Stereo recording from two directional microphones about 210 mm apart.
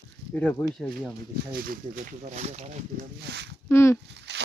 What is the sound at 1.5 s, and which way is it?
Speech, 45° right (ahead or behind).